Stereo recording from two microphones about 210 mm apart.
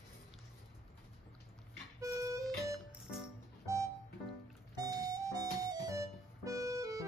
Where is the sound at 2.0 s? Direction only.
15° right (ahead or behind).